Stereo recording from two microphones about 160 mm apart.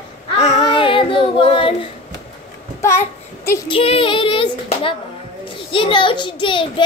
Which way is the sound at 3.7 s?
35° left (ahead or behind).